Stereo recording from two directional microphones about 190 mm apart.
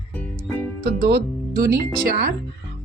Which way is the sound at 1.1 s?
50° right (ahead or behind).